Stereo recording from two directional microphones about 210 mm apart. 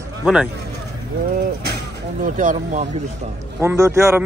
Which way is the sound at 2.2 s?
40° right (ahead or behind).